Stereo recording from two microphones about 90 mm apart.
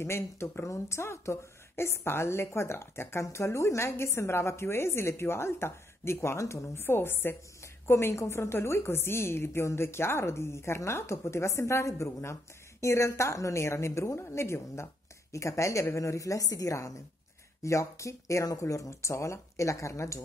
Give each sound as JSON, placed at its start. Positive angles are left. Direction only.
{"t": 0.0, "sound": "speech", "side_deg": 30}